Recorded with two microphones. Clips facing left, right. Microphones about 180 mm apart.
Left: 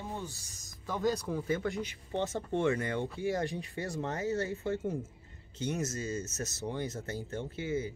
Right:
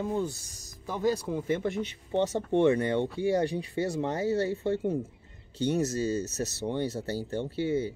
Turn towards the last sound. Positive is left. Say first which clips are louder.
# right 6 dB
turn(degrees=-30)  # may be behind; listen again after turning